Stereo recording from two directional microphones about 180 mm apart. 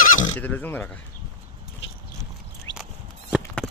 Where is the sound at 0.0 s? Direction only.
50° left (ahead or behind).